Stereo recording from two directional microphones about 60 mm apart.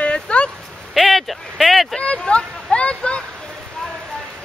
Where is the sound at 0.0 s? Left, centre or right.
Centre.